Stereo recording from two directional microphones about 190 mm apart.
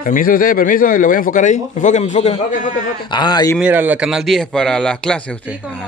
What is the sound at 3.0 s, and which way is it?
Speech, 25° left (ahead or behind).